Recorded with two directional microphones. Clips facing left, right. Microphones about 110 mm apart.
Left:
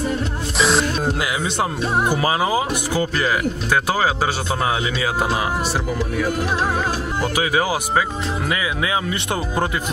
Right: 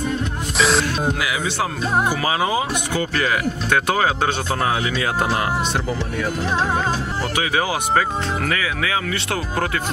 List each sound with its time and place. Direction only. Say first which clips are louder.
0.6 s music: even; centre (ahead or behind)
2.2 s speech: left 1 dB; 30° left (ahead or behind)
2.9 s speech: left 1 dB; 10° left (ahead or behind)
7.3 s speech: left 1 dB; 10° left (ahead or behind)